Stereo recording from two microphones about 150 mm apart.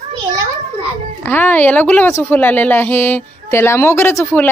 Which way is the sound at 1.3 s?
10° left (ahead or behind).